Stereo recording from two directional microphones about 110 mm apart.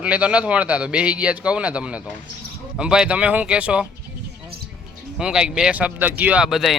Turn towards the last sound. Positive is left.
turn(degrees=-5)  # may be behind; listen again after turning